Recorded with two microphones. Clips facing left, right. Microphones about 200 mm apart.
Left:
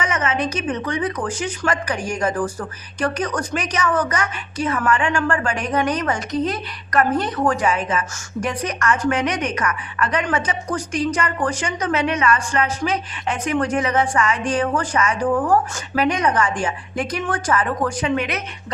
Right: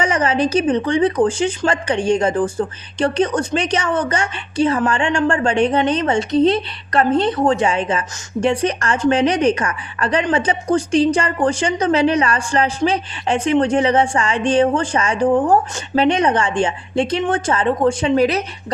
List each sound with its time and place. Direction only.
0.0 s a woman's voice: 30° right (ahead or behind)